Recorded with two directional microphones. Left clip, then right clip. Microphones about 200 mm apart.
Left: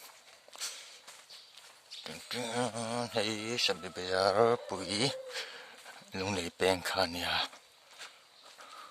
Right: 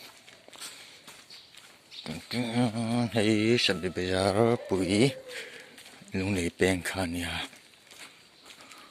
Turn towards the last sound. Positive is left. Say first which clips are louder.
# left 1 dB
turn(degrees=25)  # may be behind; listen again after turning